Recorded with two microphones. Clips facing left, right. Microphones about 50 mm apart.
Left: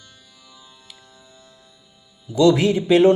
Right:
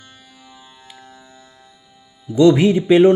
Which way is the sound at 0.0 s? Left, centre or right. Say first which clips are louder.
Right 5 dB; right.